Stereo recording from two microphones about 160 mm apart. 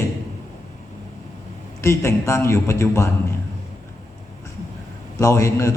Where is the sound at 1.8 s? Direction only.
20° left (ahead or behind).